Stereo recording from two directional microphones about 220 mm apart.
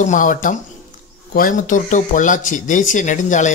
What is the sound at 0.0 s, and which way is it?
Speech, 35° left (ahead or behind).